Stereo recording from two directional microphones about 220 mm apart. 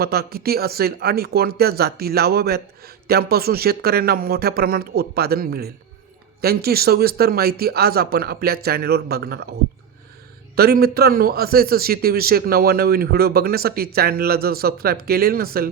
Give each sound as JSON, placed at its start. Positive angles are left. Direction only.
{"t": 0.0, "sound": "speech", "side_deg": -45}
{"t": 10.5, "sound": "speech", "side_deg": -45}